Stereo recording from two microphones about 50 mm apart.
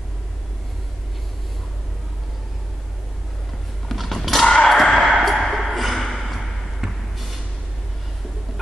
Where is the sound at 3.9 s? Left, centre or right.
Centre.